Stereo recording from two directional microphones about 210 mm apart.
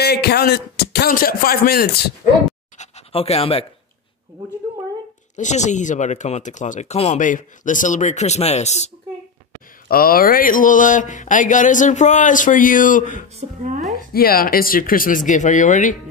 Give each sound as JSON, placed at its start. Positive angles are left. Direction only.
{"t": 0.0, "sound": "speech", "side_deg": 50}
{"t": 2.8, "sound": "pant", "side_deg": 30}
{"t": 5.3, "sound": "speech", "side_deg": 35}
{"t": 9.8, "sound": "speech", "side_deg": 45}
{"t": 13.4, "sound": "a woman's voice", "side_deg": -35}
{"t": 14.1, "sound": "speech", "side_deg": 45}